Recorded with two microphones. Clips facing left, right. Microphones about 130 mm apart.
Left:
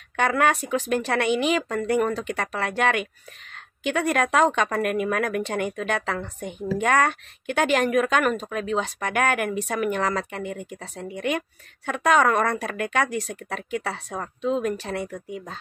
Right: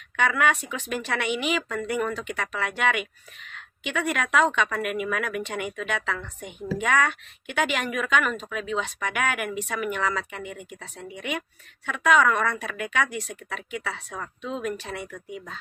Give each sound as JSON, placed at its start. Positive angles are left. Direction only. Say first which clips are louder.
{"t": 0.1, "sound": "speech", "louder": "left 2 dB", "side_deg": 40}